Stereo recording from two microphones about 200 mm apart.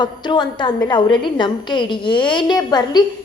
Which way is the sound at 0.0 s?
20° left (ahead or behind).